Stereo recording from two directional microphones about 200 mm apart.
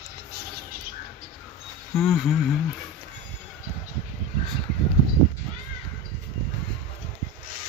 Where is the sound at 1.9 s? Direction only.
Centre (ahead or behind).